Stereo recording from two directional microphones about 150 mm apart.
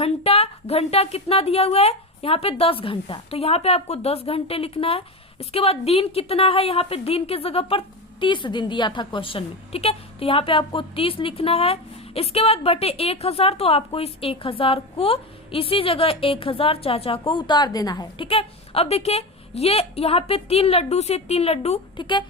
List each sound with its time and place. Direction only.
0.0 s a woman's voice: 40° left (ahead or behind); by 18.3 s 25° left (ahead or behind)
18.3 s a woman's voice: 40° left (ahead or behind)